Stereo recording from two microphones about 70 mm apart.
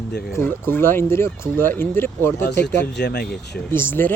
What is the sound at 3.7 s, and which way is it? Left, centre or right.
Speech, left.